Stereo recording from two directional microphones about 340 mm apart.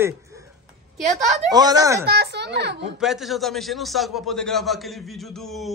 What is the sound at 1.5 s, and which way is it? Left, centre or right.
Speech, centre.